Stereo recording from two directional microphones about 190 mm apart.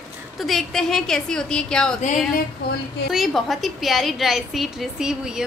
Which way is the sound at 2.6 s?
55° left (ahead or behind).